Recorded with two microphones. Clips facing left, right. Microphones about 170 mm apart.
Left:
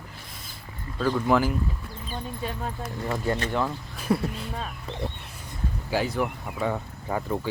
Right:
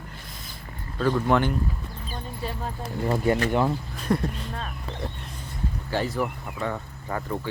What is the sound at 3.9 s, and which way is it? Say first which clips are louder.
Speech: left 4 dB; 5° left (ahead or behind).